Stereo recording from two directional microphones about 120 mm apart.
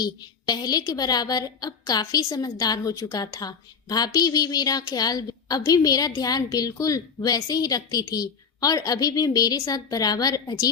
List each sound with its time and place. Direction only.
0.0 s a woman's voice: 35° left (ahead or behind)